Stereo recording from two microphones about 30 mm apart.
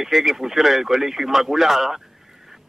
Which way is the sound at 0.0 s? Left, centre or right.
Centre.